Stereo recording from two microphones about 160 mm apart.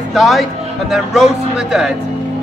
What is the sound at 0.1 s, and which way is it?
Speech, centre (ahead or behind).